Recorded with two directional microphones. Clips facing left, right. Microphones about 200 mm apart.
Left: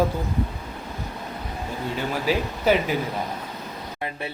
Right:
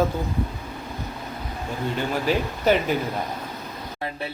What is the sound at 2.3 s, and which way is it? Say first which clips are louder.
Speech: even; 5° left (ahead or behind).